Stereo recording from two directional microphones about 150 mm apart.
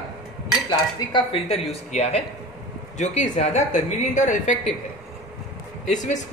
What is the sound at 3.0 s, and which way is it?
Speech, 50° left (ahead or behind).